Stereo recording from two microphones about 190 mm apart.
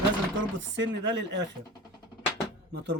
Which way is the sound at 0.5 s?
75° right (ahead or behind).